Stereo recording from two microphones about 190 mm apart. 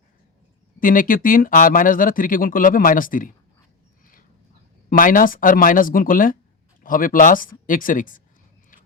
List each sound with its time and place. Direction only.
0.8 s speech: 45° left (ahead or behind)
4.9 s speech: 45° left (ahead or behind)